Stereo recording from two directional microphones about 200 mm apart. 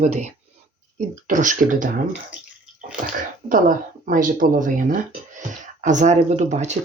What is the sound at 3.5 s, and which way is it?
Speech, 45° right (ahead or behind).